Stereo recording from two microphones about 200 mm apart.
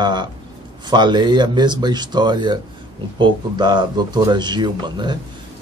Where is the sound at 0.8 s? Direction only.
20° right (ahead or behind).